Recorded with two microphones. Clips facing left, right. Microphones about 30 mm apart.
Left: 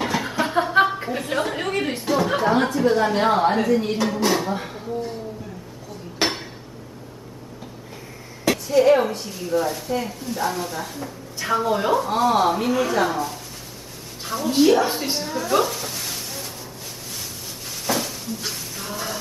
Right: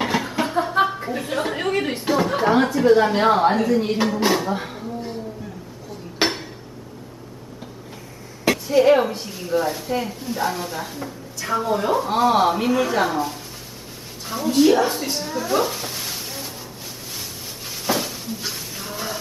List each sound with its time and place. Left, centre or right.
0.2 s a sound: centre
2.3 s speech: centre
4.3 s a sound: centre
6.2 s dishes: centre
8.5 s speech: centre
11.4 s a woman's voice: centre
11.9 s a woman's voice: centre
14.9 s a woman's voice: centre
15.2 s music: centre
17.8 s cupboard open or close: centre